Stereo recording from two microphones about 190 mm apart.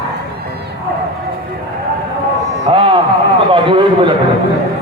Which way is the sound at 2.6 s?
25° right (ahead or behind).